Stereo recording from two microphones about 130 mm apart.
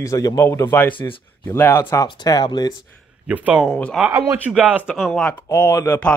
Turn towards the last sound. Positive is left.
turn(degrees=10)  # may be behind; listen again after turning